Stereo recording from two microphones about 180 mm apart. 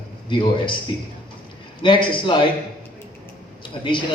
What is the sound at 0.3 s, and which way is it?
Speech, 25° left (ahead or behind).